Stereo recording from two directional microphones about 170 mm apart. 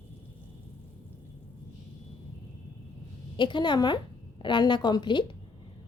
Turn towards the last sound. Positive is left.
turn(degrees=25)  # may be behind; listen again after turning